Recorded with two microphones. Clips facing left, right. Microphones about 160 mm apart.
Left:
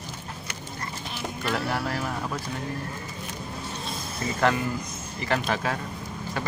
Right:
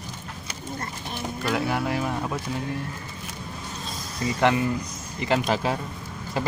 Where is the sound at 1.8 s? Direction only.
15° right (ahead or behind).